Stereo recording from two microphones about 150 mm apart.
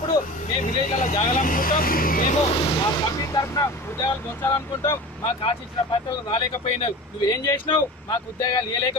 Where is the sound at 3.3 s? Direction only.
20° left (ahead or behind).